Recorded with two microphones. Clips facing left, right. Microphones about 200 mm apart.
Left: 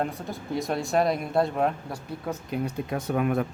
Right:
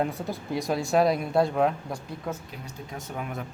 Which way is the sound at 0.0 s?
Centre (ahead or behind).